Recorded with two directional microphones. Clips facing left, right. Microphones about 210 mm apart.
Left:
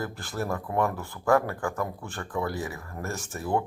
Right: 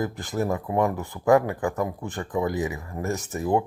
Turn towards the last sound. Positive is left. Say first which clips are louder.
# right 4 dB
turn(degrees=-15)  # may be behind; listen again after turning